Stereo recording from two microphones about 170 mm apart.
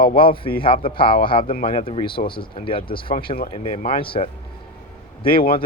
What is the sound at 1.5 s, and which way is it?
Speech, 55° left (ahead or behind).